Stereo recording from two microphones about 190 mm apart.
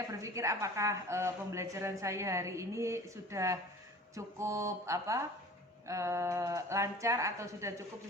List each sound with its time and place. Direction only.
0.1 s a woman's voice: 15° right (ahead or behind)